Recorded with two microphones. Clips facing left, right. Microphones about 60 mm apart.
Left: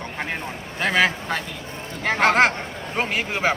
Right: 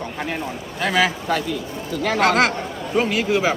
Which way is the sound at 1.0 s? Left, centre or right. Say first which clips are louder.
Right 2 dB; left.